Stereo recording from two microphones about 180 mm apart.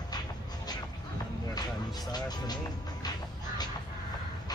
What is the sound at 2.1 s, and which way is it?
Music, 20° left (ahead or behind).